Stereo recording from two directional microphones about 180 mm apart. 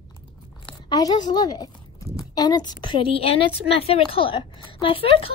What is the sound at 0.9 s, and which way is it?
A woman's voice, 25° left (ahead or behind).